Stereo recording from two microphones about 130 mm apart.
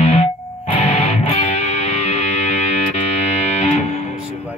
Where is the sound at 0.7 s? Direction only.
60° left (ahead or behind).